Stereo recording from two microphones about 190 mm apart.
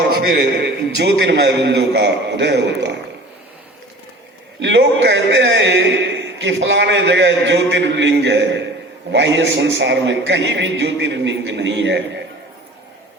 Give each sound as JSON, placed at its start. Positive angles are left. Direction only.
{"t": 0.2, "sound": "a man's voice", "side_deg": -60}
{"t": 4.6, "sound": "a man's voice", "side_deg": -70}